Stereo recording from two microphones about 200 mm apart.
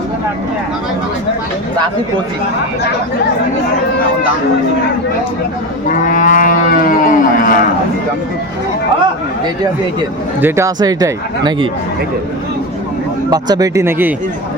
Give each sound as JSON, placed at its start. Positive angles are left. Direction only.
{"t": 5.9, "sound": "wild animals", "side_deg": 40}
{"t": 10.4, "sound": "speech", "side_deg": -15}
{"t": 13.3, "sound": "speech", "side_deg": -20}